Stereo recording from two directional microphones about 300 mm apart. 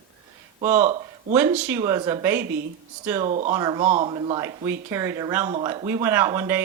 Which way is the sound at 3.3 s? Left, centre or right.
Right.